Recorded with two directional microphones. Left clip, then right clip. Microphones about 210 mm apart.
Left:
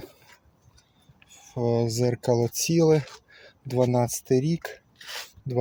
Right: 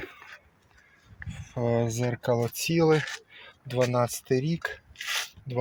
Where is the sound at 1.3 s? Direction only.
30° left (ahead or behind).